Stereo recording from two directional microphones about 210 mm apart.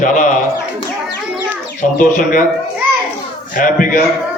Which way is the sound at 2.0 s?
40° left (ahead or behind).